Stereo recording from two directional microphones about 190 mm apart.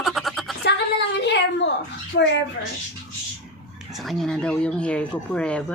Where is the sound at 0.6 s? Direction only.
60° left (ahead or behind).